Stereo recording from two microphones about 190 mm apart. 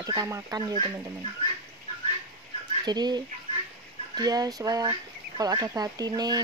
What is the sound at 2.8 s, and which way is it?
Speech, 20° right (ahead or behind).